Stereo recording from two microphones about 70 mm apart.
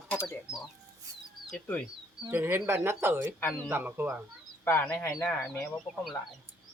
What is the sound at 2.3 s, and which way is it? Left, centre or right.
Speech, right.